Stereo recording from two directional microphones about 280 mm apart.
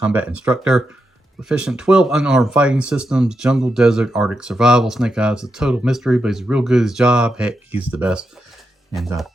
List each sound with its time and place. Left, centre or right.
0.0 s speech: centre